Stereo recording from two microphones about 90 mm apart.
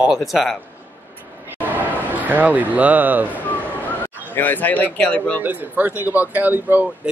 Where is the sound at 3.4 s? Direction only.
20° left (ahead or behind).